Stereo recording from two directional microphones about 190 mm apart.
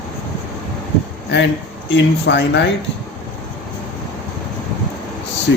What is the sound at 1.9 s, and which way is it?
Speech, 65° left (ahead or behind).